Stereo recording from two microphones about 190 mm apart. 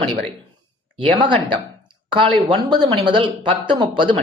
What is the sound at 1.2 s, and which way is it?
Speech, 25° right (ahead or behind).